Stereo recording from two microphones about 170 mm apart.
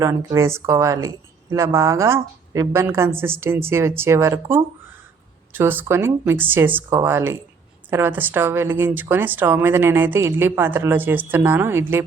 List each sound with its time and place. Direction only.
0.0 s speech: 20° right (ahead or behind)